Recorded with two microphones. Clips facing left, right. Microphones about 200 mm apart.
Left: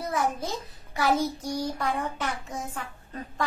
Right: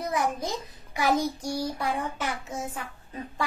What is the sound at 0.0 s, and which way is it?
A child's voice, 15° right (ahead or behind).